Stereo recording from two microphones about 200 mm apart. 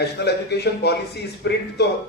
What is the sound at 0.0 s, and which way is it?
A man's voice, 55° left (ahead or behind).